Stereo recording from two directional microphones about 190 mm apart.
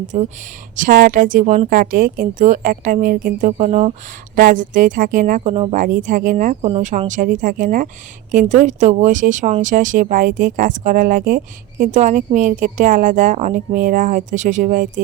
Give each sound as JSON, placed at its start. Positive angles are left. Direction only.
{"t": 0.1, "sound": "speech", "side_deg": -40}
{"t": 4.4, "sound": "speech", "side_deg": -45}